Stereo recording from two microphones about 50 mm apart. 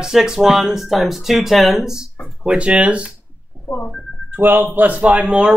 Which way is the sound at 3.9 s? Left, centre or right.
Centre.